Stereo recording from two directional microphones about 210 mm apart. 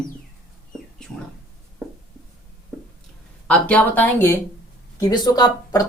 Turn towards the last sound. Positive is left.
turn(degrees=20)  # may be behind; listen again after turning